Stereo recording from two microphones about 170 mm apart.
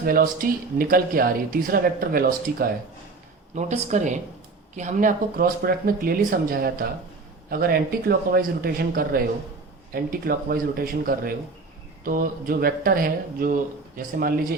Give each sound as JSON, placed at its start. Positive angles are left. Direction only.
{"t": 0.0, "sound": "speech", "side_deg": -60}
{"t": 3.5, "sound": "speech", "side_deg": -45}